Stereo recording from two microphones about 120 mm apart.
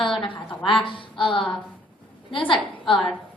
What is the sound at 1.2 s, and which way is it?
Speech, 45° left (ahead or behind).